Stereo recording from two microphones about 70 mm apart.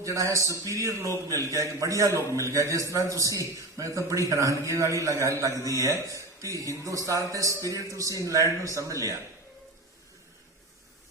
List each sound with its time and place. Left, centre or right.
0.0 s a man's voice: right